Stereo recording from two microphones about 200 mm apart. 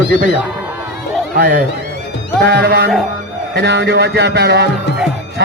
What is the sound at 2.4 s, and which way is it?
A man's voice, 55° right (ahead or behind).